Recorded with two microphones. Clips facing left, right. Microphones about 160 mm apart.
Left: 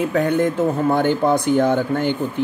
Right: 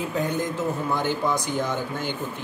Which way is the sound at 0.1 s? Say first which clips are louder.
Left 8 dB; 65° left (ahead or behind).